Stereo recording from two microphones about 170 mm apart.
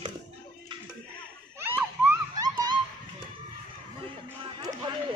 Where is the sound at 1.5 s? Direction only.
15° right (ahead or behind).